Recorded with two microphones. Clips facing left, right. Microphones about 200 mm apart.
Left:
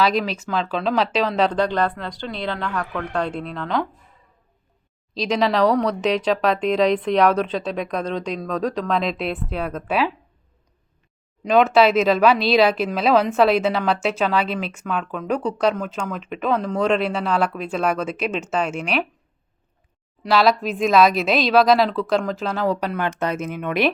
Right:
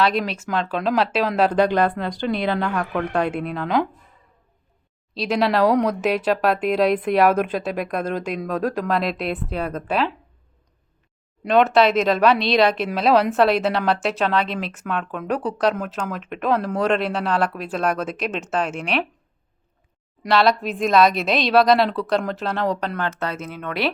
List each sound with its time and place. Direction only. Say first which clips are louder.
0.0 s speech: left 1 dB; centre (ahead or behind)
5.1 s speech: even; 5° right (ahead or behind)
11.4 s speech: left 1 dB; centre (ahead or behind)
20.3 s speech: left 1 dB; centre (ahead or behind)
23.0 s speech: left 3 dB; 15° left (ahead or behind)